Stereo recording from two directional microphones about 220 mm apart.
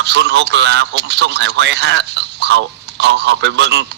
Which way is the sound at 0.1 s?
50° right (ahead or behind).